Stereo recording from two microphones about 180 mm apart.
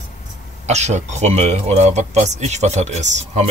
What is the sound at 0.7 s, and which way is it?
A man's voice, 40° right (ahead or behind).